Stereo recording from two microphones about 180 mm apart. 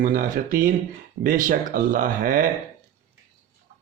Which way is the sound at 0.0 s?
50° right (ahead or behind).